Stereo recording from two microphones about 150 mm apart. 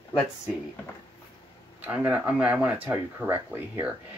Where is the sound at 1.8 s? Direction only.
10° right (ahead or behind).